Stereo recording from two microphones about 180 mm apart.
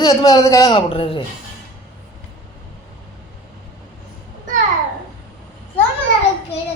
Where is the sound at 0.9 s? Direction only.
30° left (ahead or behind).